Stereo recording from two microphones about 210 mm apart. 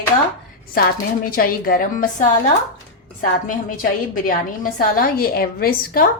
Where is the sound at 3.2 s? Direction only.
40° left (ahead or behind).